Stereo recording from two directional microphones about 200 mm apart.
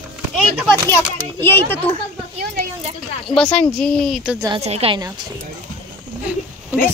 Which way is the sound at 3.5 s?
5° left (ahead or behind).